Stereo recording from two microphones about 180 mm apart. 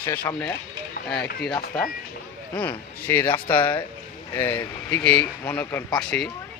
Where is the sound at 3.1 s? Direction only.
10° left (ahead or behind).